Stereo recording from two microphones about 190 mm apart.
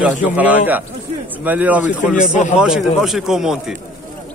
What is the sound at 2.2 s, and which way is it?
Speech, 45° left (ahead or behind).